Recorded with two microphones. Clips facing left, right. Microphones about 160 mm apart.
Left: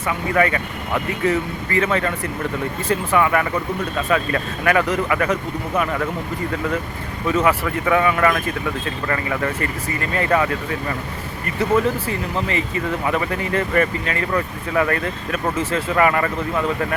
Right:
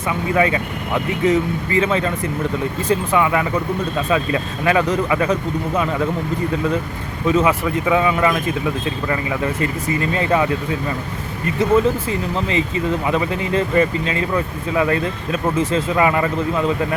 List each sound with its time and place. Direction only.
0.3 s speech: 20° right (ahead or behind)
7.3 s speech: 20° right (ahead or behind)
12.0 s speech: 20° right (ahead or behind)